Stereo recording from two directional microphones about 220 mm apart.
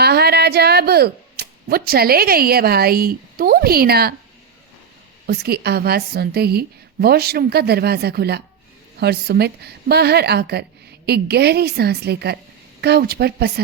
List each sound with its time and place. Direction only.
0.0 s speech: 45° right (ahead or behind)
5.2 s a woman's voice: 45° right (ahead or behind)